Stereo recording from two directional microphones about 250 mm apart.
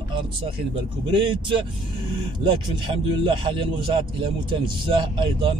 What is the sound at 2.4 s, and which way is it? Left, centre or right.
Speech, centre.